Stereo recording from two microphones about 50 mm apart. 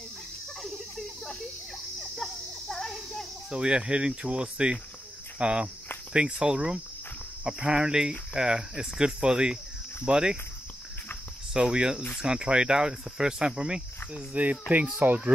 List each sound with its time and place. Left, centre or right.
0.6 s a sound: centre
2.0 s cricket: centre
3.4 s speech: centre
11.5 s speech: centre
14.3 s speech: right